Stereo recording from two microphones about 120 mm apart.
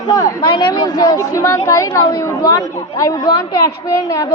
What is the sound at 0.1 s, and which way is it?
A woman's voice, 35° left (ahead or behind).